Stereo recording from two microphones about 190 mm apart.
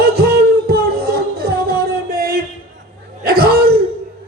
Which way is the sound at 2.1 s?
55° right (ahead or behind).